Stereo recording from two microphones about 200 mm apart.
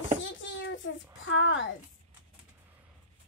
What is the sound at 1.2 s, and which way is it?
Speech, 70° left (ahead or behind).